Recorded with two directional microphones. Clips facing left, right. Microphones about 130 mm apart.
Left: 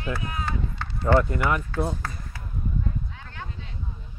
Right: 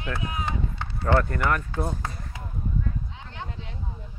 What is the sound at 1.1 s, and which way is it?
Speech, 15° left (ahead or behind).